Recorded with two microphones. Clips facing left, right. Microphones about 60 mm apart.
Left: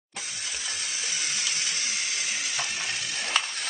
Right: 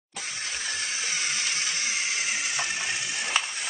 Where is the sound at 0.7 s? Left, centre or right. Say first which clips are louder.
Right 3 dB; right.